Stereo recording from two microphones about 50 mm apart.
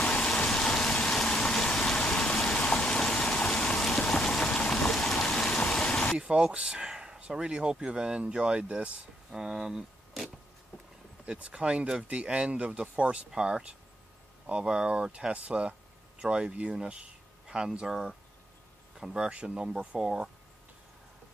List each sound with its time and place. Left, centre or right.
0.0 s vehicle: centre
2.9 s a sound: centre
3.2 s vehicle: left
3.5 s a sound: centre
6.1 s speech: centre
9.3 s speech: centre
11.2 s speech: right
17.0 s a sound: centre
17.7 s speech: centre
20.0 s speech: centre